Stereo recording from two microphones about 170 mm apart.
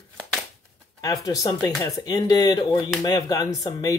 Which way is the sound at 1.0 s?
20° left (ahead or behind).